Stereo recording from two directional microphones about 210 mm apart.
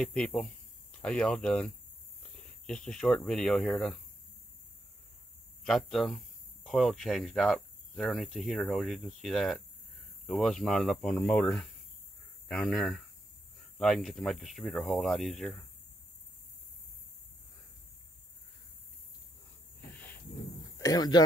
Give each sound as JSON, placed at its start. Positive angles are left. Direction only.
{"t": 0.0, "sound": "speech", "side_deg": 5}
{"t": 5.6, "sound": "speech", "side_deg": 0}
{"t": 19.9, "sound": "cricket", "side_deg": 5}
{"t": 20.7, "sound": "speech", "side_deg": 15}